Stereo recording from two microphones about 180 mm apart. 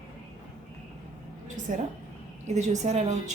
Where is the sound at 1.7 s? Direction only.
45° right (ahead or behind).